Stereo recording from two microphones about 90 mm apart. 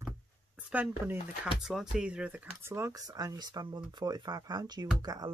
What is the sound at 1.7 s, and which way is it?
Speech, 5° right (ahead or behind).